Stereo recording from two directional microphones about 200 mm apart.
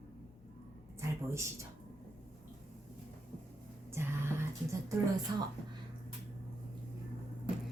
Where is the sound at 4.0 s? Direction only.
10° right (ahead or behind).